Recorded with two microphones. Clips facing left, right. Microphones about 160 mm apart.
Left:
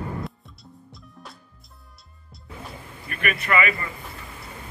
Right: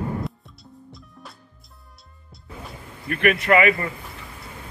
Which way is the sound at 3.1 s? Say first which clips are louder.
Right 7 dB; 75° right (ahead or behind).